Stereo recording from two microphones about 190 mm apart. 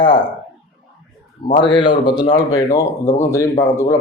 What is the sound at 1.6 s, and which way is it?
Speech, 25° left (ahead or behind).